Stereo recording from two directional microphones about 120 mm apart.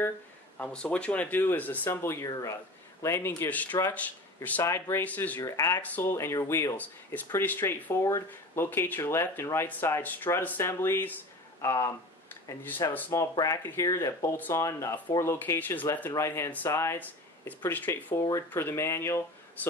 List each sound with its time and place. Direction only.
0.6 s speech: 10° left (ahead or behind)
2.2 s speech: 30° left (ahead or behind)
3.0 s speech: 20° left (ahead or behind)
5.4 s speech: 25° left (ahead or behind)
5.8 s speech: 15° left (ahead or behind)
13.1 s speech: 25° left (ahead or behind)